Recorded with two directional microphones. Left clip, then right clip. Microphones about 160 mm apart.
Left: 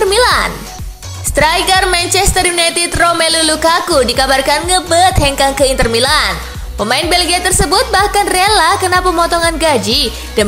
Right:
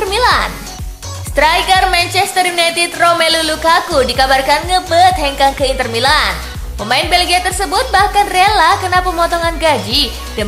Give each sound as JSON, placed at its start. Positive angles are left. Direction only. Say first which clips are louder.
{"t": 0.0, "sound": "music", "louder": "left 2 dB", "side_deg": 35}
{"t": 1.3, "sound": "a woman's voice", "louder": "even", "side_deg": 35}